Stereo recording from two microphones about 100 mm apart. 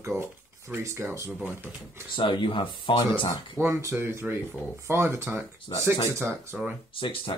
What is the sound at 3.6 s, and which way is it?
Speech, 25° right (ahead or behind).